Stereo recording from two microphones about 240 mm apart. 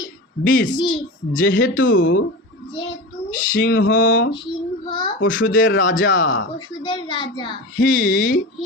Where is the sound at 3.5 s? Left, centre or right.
Left.